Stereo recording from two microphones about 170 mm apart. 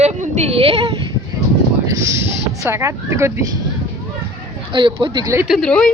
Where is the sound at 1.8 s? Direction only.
20° right (ahead or behind).